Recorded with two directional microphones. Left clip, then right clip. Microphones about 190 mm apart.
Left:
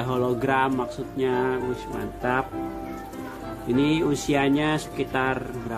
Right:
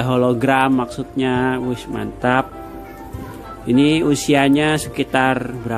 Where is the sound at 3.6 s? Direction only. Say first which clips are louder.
Right 7 dB; 35° right (ahead or behind).